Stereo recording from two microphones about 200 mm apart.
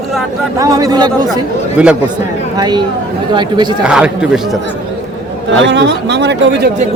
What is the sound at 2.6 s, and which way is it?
Speech, 20° right (ahead or behind).